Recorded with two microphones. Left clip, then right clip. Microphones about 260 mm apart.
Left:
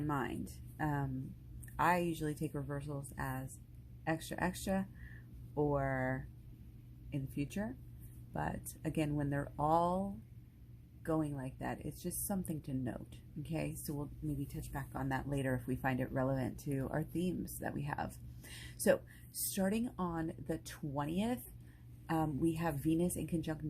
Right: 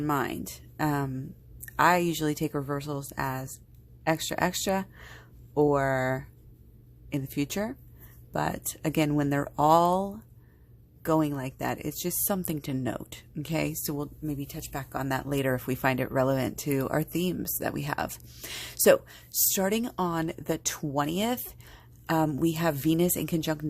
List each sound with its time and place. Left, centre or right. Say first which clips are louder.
0.1 s a woman's voice: right 11 dB; right